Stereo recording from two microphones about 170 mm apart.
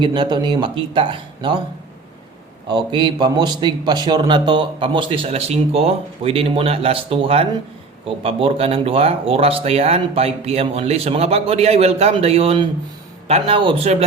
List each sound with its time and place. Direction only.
0.0 s a man's voice: 25° right (ahead or behind)
2.6 s a man's voice: 25° right (ahead or behind)